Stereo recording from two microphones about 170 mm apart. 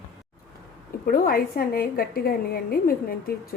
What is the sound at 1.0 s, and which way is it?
A woman's voice, 55° left (ahead or behind).